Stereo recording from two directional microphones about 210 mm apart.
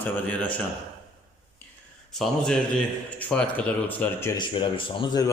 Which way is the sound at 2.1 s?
Centre (ahead or behind).